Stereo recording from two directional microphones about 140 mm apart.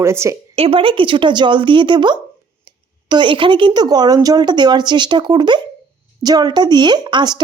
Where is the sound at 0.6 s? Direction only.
40° right (ahead or behind).